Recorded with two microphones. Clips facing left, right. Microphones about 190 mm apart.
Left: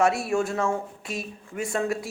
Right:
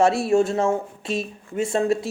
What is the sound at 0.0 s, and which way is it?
Speech, 30° right (ahead or behind).